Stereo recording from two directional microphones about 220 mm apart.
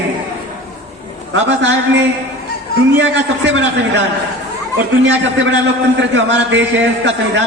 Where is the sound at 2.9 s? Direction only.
55° right (ahead or behind).